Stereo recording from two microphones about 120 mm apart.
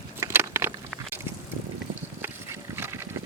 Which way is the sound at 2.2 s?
20° right (ahead or behind).